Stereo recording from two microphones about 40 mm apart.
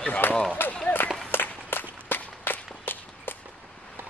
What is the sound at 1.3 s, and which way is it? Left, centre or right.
Walk, left.